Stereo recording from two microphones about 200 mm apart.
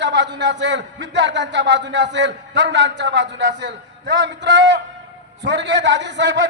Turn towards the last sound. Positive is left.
turn(degrees=-60)  # may be behind; listen again after turning